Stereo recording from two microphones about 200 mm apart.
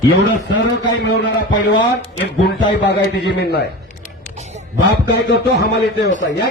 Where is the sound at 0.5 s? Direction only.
65° left (ahead or behind).